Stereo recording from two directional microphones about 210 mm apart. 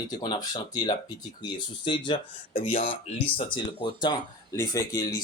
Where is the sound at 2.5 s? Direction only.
35° left (ahead or behind).